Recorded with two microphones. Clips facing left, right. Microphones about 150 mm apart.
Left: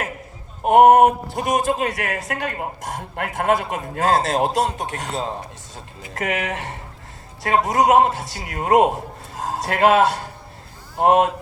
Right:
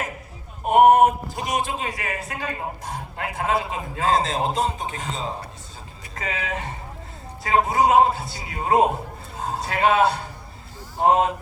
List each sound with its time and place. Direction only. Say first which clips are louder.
0.6 s speech: left 3 dB; 60° left (ahead or behind)
1.8 s a man's voice: left 5 dB; 75° left (ahead or behind)
9.6 s a man's voice: left 3 dB; 70° left (ahead or behind)